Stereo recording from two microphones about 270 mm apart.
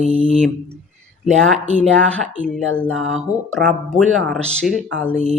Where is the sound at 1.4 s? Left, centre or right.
Centre.